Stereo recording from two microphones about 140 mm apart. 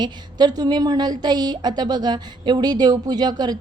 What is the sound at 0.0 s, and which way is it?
A woman's voice, 30° right (ahead or behind).